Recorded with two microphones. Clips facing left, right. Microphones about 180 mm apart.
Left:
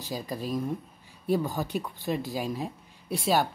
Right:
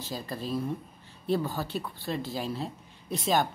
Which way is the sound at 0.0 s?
15° left (ahead or behind).